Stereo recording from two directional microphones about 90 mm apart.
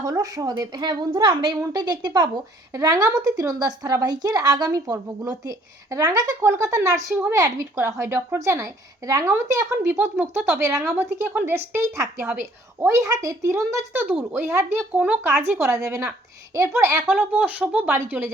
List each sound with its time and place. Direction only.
0.0 s a woman's voice: 45° right (ahead or behind); by 12.0 s 25° right (ahead or behind)
12.2 s speech: 15° right (ahead or behind)
12.8 s a woman's voice: 35° right (ahead or behind)
13.9 s a woman's voice: 15° right (ahead or behind)
17.1 s speech: 15° right (ahead or behind)